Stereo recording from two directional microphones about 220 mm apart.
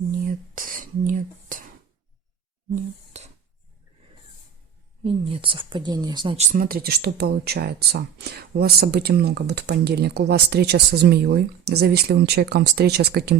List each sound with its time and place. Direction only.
0.5 s whispering: 40° right (ahead or behind)
3.1 s cutlery: 30° right (ahead or behind)
5.0 s speech: 25° right (ahead or behind); by 13.3 s 45° right (ahead or behind)